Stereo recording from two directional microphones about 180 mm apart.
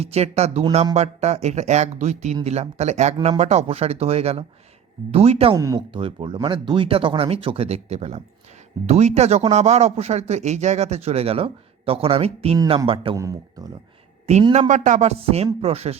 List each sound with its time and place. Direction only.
0.0 s a man's voice: 35° right (ahead or behind)
5.5 s speech: 15° right (ahead or behind)
5.9 s a man's voice: 30° right (ahead or behind)
13.1 s speech: 15° right (ahead or behind)
14.5 s a man's voice: 40° right (ahead or behind)